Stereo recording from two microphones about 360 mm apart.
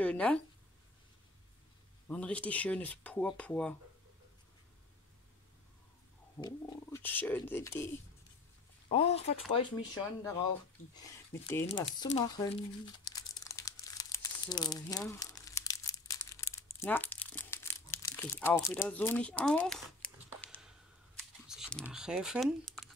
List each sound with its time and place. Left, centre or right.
0.0 s speech: centre
2.0 s speech: centre
6.4 s speech: centre
8.9 s speech: centre
11.6 s crumpling: centre
21.5 s speech: centre